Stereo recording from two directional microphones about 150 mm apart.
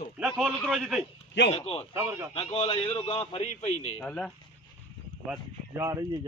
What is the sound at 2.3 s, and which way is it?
A man's voice, 40° left (ahead or behind).